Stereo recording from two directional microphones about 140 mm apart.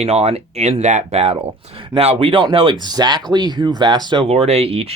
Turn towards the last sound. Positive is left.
turn(degrees=-45)  # may be behind; listen again after turning